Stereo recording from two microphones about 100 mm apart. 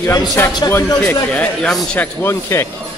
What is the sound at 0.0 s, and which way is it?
Speech, 35° left (ahead or behind).